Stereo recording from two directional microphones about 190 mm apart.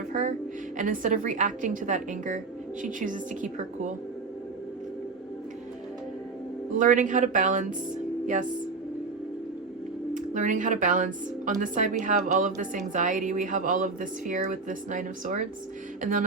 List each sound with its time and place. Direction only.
0.1 s music: 40° right (ahead or behind)
0.8 s speech: 45° right (ahead or behind)
6.7 s speech: 40° right (ahead or behind)
10.2 s speech: 40° right (ahead or behind)
16.0 s a sound: 45° right (ahead or behind)